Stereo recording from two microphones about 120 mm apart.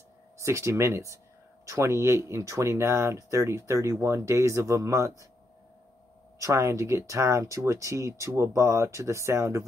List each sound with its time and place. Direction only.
0.4 s speech: 25° right (ahead or behind)
6.3 s speech: 25° right (ahead or behind)